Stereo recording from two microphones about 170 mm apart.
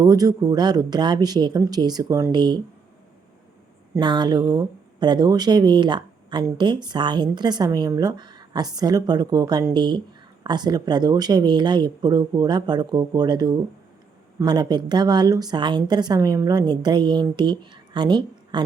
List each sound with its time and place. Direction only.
0.0 s speech: 20° right (ahead or behind)
4.0 s speech: 25° right (ahead or behind)